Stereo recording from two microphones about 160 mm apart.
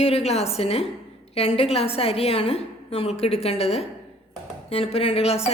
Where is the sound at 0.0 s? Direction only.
40° left (ahead or behind).